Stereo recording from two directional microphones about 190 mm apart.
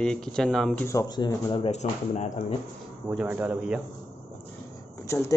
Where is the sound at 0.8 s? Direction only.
20° left (ahead or behind); by 2.3 s 35° left (ahead or behind).